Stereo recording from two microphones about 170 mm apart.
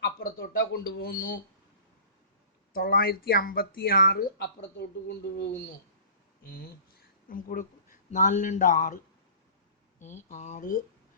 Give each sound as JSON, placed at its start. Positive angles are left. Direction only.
{"t": 0.0, "sound": "speech", "side_deg": 70}
{"t": 2.7, "sound": "speech", "side_deg": 60}
{"t": 6.4, "sound": "speech", "side_deg": 65}
{"t": 10.2, "sound": "speech", "side_deg": 45}